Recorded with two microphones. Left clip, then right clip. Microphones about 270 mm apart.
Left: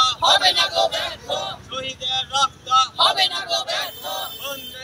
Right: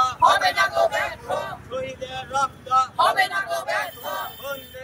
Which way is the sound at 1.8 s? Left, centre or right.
Centre.